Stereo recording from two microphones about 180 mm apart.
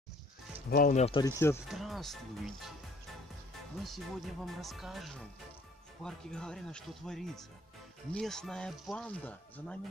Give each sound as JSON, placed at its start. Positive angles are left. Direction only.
{"t": 0.7, "sound": "speech", "side_deg": 50}
{"t": 1.2, "sound": "speech", "side_deg": 15}
{"t": 1.7, "sound": "speech", "side_deg": 0}
{"t": 3.8, "sound": "speech", "side_deg": 0}